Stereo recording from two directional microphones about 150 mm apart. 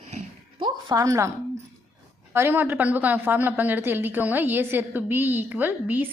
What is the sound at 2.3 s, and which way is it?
A woman's voice, 15° right (ahead or behind).